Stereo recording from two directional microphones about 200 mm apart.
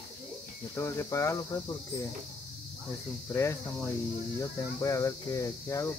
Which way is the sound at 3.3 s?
15° left (ahead or behind).